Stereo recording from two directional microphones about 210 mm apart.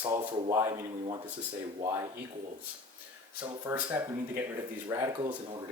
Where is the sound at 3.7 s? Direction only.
15° right (ahead or behind).